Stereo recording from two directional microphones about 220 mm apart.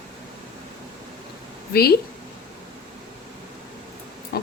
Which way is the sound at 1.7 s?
45° left (ahead or behind).